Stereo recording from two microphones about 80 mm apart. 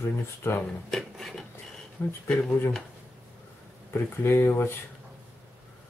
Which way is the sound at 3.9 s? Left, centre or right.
Left.